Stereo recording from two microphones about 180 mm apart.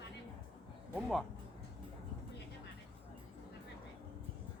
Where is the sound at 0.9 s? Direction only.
5° right (ahead or behind).